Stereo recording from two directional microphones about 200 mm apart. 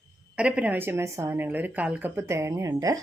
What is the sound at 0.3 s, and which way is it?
A woman's voice, 5° right (ahead or behind).